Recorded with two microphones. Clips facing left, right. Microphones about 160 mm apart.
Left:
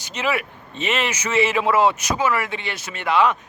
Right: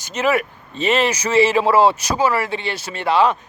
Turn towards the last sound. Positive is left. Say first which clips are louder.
# right 2 dB
turn(degrees=-30)  # may be behind; listen again after turning